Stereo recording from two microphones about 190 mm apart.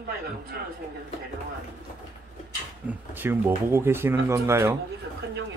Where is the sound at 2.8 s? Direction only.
10° right (ahead or behind).